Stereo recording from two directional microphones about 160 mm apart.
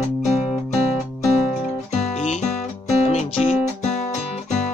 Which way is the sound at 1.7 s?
45° left (ahead or behind).